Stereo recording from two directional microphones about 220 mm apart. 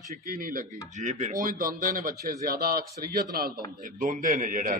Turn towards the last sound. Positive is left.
turn(degrees=-35)  # may be behind; listen again after turning